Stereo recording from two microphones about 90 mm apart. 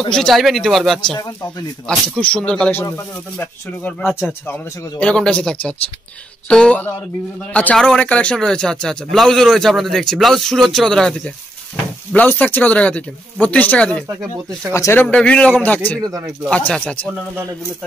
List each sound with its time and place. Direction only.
0.1 s a man's voice: 5° left (ahead or behind)
4.1 s speech: 25° left (ahead or behind)
5.0 s a man's voice: 10° left (ahead or behind)
12.1 s speech: 20° left (ahead or behind)
14.7 s speech: 35° left (ahead or behind)
15.0 s speech: 15° left (ahead or behind)
16.0 s speech: 40° right (ahead or behind)
16.4 s speech: 15° left (ahead or behind)